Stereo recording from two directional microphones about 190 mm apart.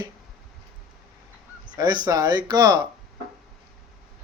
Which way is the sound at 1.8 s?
20° right (ahead or behind).